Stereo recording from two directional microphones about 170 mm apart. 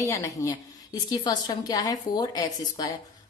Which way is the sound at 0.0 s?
20° left (ahead or behind).